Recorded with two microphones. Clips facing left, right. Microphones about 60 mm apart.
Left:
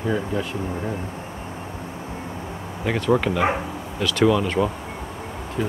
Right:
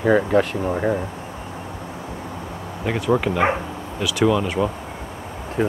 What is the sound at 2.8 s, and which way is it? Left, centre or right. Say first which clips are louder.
Speech: even; centre.